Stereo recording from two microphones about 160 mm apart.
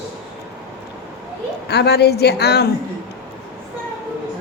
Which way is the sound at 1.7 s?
90° left.